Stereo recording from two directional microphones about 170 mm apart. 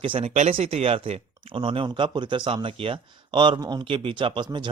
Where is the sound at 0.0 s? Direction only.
30° right (ahead or behind).